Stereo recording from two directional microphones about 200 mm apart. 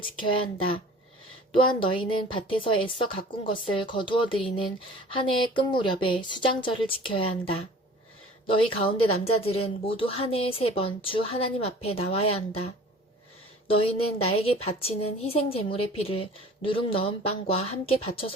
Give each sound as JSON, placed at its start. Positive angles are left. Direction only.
{"t": 0.0, "sound": "a woman's voice", "side_deg": 25}
{"t": 9.2, "sound": "a woman's voice", "side_deg": 30}